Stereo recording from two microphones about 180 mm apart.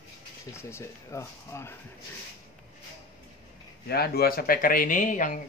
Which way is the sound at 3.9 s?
60° left (ahead or behind).